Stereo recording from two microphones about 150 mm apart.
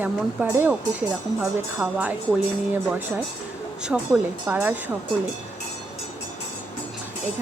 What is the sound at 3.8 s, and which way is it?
Speech, 5° right (ahead or behind).